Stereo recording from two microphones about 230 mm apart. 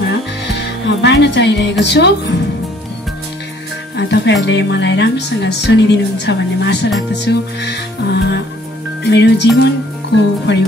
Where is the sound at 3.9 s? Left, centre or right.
Left.